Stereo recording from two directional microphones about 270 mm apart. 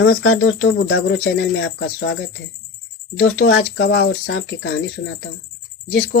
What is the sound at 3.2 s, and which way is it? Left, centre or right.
Speech, left.